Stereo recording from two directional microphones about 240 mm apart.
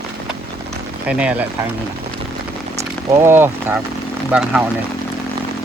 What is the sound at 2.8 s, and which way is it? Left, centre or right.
Speech, centre.